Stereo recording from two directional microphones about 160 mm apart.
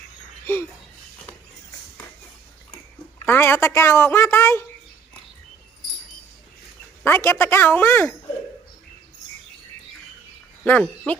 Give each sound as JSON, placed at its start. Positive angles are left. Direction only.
{"t": 0.5, "sound": "a sound", "side_deg": 15}
{"t": 3.2, "sound": "a woman's voice", "side_deg": 15}
{"t": 7.0, "sound": "a woman's voice", "side_deg": 15}
{"t": 10.6, "sound": "speech", "side_deg": 10}